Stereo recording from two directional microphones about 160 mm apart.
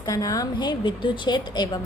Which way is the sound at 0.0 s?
20° left (ahead or behind).